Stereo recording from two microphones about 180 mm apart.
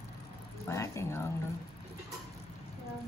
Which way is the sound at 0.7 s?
15° left (ahead or behind).